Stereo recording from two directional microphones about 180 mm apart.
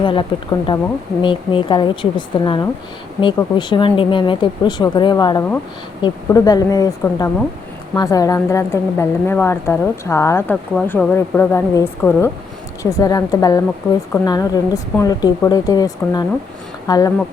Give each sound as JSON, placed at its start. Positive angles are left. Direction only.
{"t": 0.0, "sound": "a woman's voice", "side_deg": 30}